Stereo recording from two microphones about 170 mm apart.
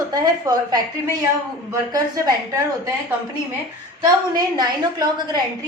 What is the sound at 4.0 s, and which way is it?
A woman's voice, 25° right (ahead or behind).